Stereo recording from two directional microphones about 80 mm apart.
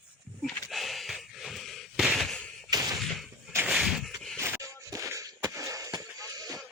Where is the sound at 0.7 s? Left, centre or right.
Centre.